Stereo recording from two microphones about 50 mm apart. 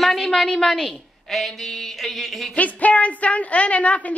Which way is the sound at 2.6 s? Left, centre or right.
Left.